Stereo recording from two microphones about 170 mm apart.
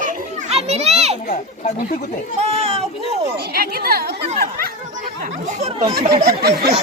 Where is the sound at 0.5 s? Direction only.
40° right (ahead or behind).